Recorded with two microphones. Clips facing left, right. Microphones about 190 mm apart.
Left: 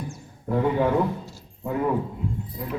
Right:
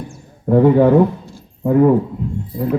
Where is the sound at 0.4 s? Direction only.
45° right (ahead or behind).